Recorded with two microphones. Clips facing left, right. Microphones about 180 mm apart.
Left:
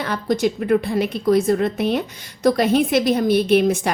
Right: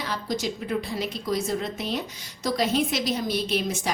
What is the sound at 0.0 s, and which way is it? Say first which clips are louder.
A woman's voice: left 9 dB; 55° left (ahead or behind).